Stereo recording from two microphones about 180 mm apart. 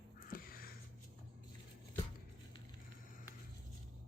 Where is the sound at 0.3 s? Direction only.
50° left (ahead or behind).